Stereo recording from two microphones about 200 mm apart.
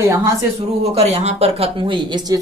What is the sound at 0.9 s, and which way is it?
Speech, 30° right (ahead or behind).